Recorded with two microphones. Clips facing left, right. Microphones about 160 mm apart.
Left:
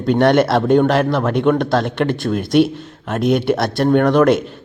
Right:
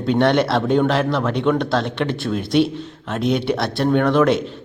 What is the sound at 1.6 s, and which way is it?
Speech, 45° left (ahead or behind).